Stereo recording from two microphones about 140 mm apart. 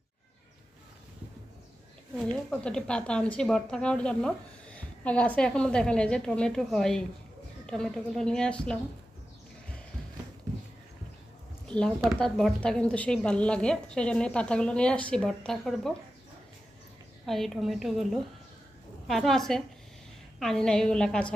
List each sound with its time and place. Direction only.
2.1 s a woman's voice: 10° left (ahead or behind)
11.7 s a woman's voice: 5° left (ahead or behind)
17.2 s a woman's voice: centre (ahead or behind)